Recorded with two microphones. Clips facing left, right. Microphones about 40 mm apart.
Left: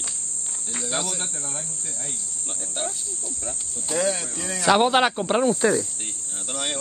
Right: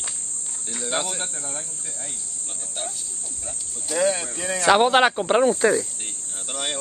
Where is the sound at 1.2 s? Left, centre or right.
Centre.